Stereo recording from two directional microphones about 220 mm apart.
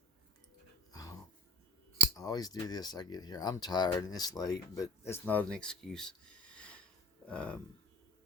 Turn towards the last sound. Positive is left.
turn(degrees=5)  # may be behind; listen again after turning